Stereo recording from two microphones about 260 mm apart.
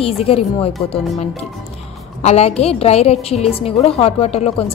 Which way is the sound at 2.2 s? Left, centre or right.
Left.